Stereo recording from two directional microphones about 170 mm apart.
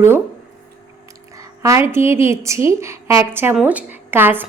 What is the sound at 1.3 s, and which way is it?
A woman's voice, 20° right (ahead or behind).